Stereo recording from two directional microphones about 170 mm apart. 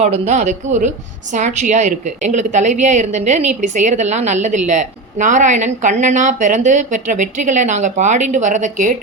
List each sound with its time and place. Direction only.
0.0 s a woman's voice: 40° right (ahead or behind)